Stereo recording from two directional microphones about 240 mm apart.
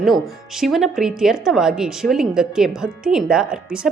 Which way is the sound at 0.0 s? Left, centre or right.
Centre.